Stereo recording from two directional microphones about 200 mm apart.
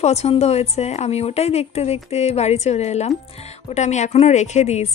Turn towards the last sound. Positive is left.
turn(degrees=35)  # may be behind; listen again after turning